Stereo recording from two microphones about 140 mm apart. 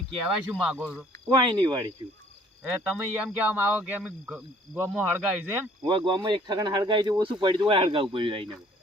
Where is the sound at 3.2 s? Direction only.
10° right (ahead or behind).